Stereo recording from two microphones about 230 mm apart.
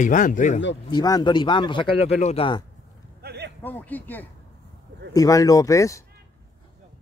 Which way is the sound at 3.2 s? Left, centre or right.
Right.